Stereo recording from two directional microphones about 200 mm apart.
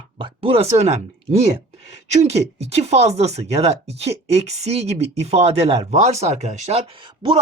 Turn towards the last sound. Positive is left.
turn(degrees=-25)  # may be behind; listen again after turning